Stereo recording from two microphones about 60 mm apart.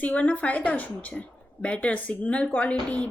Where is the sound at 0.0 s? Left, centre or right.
Left.